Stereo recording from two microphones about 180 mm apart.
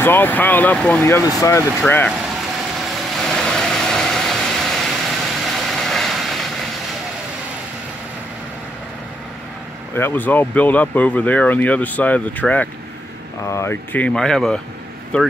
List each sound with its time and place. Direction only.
0.0 s speech: 10° left (ahead or behind)
1.0 s speech: 15° left (ahead or behind)
1.8 s speech: 5° left (ahead or behind)
3.2 s vehicle: centre (ahead or behind)
9.9 s speech: 10° left (ahead or behind)